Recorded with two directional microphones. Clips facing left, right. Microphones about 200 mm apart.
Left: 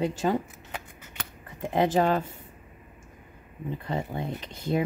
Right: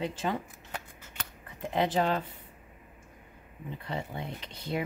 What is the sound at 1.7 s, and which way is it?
Speech, 45° left (ahead or behind).